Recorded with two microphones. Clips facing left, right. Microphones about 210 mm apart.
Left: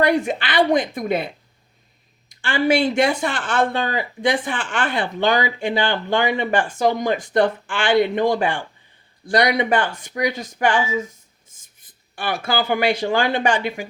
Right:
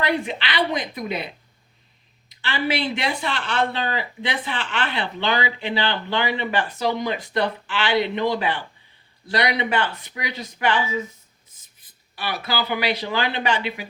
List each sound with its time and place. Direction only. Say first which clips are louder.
0.0 s speech: left 6 dB; 45° left (ahead or behind)
2.3 s speech: left 6 dB; 45° left (ahead or behind)